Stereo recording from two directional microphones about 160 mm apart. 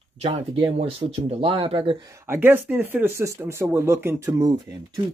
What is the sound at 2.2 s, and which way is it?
Speech, 15° right (ahead or behind).